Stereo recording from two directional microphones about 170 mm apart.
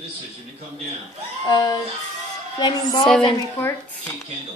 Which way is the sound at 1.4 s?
25° left (ahead or behind).